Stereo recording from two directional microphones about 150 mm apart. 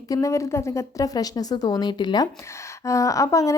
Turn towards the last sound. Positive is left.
turn(degrees=20)  # may be behind; listen again after turning